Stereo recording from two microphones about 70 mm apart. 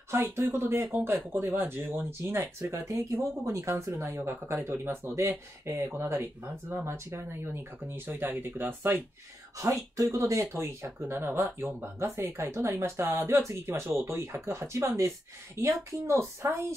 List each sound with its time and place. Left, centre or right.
0.1 s speech: right
2.7 s speech: right
4.0 s speech: right
9.6 s speech: right